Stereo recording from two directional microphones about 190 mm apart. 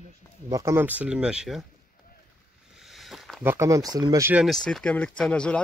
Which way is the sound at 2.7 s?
Centre (ahead or behind).